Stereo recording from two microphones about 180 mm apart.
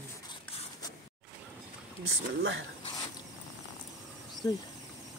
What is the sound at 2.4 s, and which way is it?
Speech, 90° right.